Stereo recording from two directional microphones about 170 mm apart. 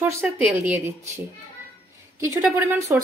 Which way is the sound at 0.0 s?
10° right (ahead or behind).